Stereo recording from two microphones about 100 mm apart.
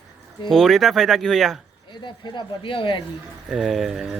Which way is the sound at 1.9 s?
50° left (ahead or behind).